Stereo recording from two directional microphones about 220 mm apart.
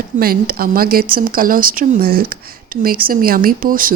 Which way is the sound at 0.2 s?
40° right (ahead or behind).